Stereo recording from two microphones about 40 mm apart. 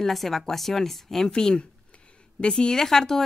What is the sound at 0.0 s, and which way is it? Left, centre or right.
Speech, centre.